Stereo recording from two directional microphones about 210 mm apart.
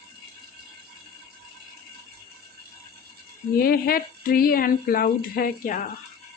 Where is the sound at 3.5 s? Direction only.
45° left (ahead or behind).